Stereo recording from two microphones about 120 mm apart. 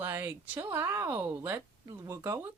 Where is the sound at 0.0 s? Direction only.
20° right (ahead or behind).